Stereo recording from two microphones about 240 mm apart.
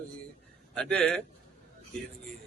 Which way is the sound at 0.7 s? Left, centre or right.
Centre.